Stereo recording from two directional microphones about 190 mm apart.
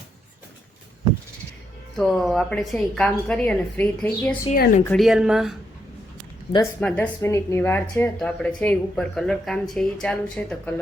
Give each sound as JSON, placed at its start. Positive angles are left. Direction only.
{"t": 2.0, "sound": "a woman's voice", "side_deg": 0}
{"t": 4.5, "sound": "a woman's voice", "side_deg": 50}
{"t": 4.9, "sound": "a woman's voice", "side_deg": 0}
{"t": 6.5, "sound": "a woman's voice", "side_deg": 15}